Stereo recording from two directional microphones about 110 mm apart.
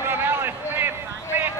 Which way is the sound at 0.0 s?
20° right (ahead or behind).